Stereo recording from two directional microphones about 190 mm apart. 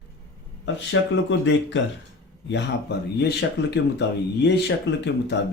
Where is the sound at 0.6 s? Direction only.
70° left (ahead or behind).